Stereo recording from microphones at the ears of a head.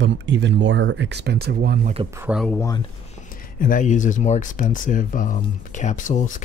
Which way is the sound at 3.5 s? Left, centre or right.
Left.